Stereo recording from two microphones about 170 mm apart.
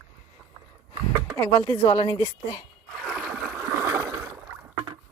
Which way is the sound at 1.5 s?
15° left (ahead or behind).